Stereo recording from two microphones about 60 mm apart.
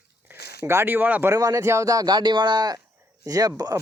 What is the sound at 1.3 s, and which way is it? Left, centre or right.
Speech, right.